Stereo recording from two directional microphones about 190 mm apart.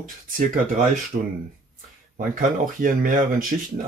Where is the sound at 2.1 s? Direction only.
45° right (ahead or behind).